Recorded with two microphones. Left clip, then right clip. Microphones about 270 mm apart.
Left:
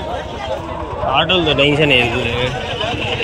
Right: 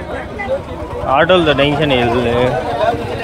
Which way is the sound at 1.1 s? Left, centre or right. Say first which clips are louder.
Right 4 dB; right.